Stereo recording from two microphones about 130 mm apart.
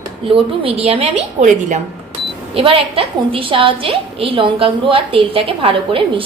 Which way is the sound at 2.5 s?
45° right (ahead or behind).